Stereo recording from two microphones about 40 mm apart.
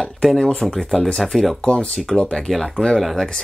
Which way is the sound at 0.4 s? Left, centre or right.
Left.